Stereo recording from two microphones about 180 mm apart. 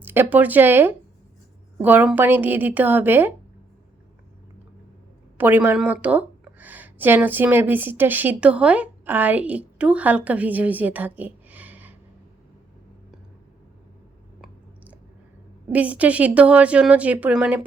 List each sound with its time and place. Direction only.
0.0 s a woman's voice: 10° right (ahead or behind)
5.4 s a woman's voice: 10° right (ahead or behind)
15.7 s a woman's voice: 10° right (ahead or behind)